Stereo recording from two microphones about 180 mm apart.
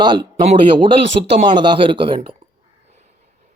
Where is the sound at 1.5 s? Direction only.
25° right (ahead or behind).